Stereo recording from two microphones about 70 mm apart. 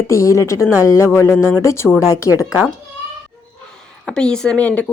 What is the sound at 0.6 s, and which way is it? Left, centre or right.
Speech, right.